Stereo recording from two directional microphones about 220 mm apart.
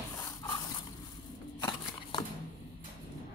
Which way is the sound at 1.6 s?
20° left (ahead or behind).